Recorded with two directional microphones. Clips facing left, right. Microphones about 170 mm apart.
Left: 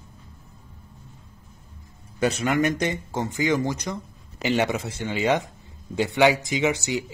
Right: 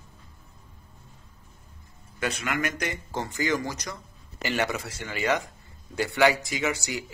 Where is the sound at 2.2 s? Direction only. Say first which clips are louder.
Left 7 dB; 35° left (ahead or behind).